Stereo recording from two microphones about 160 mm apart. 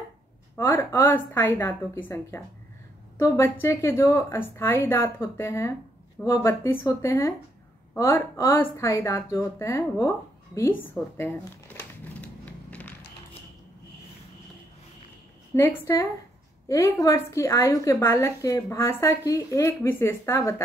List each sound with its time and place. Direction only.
0.6 s a woman's voice: 15° left (ahead or behind)
12.0 s a sound: 10° left (ahead or behind)
15.5 s a woman's voice: 15° left (ahead or behind)